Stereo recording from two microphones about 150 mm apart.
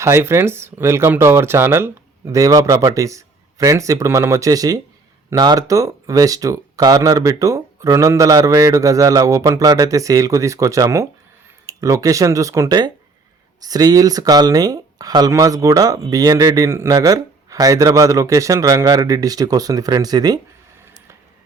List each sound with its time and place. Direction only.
0.0 s speech: 15° right (ahead or behind)